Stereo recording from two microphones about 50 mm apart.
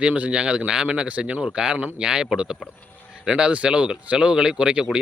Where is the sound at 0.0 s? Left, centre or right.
Right.